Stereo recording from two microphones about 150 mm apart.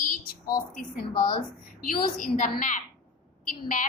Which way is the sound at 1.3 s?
70° left (ahead or behind).